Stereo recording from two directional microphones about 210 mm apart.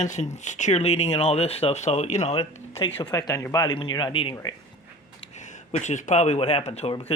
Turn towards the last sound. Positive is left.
turn(degrees=25)  # may be behind; listen again after turning